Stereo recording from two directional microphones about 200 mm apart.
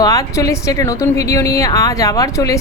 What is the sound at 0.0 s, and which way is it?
A woman's voice, 15° left (ahead or behind).